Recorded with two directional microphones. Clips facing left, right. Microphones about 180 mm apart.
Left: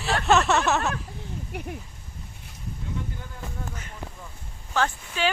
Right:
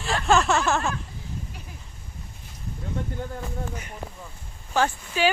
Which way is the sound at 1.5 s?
65° left (ahead or behind).